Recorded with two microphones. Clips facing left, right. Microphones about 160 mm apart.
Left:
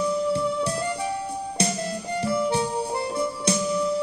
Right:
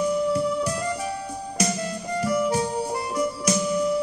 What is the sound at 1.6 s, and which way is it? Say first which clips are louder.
Music: right 1 dB; 30° left (ahead or behind).